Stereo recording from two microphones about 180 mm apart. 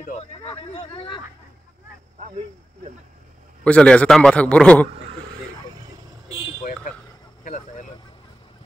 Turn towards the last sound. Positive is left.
turn(degrees=45)  # may be behind; listen again after turning